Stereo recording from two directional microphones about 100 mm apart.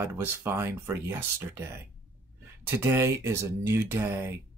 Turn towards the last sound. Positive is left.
turn(degrees=-25)  # may be behind; listen again after turning